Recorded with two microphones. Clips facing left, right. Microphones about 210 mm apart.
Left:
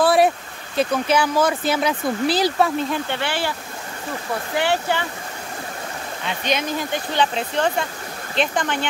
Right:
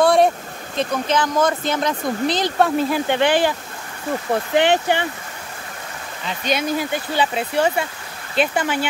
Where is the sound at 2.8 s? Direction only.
5° right (ahead or behind).